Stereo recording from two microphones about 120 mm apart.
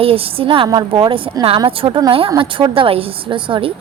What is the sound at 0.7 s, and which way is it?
A woman's voice, 35° right (ahead or behind).